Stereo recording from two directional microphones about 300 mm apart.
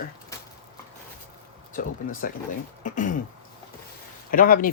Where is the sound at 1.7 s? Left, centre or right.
Left.